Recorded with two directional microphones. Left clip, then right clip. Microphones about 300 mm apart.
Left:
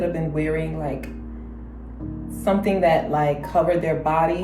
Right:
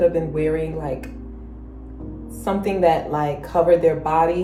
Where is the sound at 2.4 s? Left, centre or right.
Centre.